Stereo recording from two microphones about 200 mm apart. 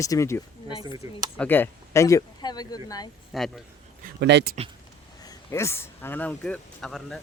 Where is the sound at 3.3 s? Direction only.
Centre (ahead or behind).